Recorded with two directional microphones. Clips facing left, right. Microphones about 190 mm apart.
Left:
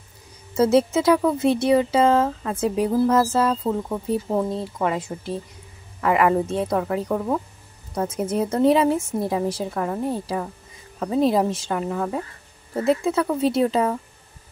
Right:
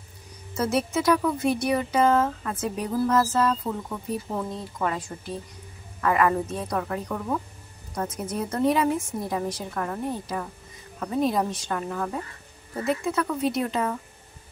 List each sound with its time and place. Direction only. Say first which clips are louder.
0.6 s speech: left 7 dB; 25° left (ahead or behind)